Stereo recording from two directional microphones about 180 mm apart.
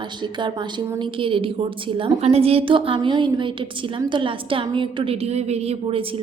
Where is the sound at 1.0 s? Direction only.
30° right (ahead or behind).